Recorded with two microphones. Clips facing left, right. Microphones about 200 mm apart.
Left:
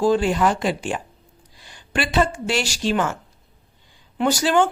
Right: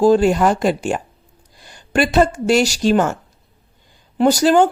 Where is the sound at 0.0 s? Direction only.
40° right (ahead or behind).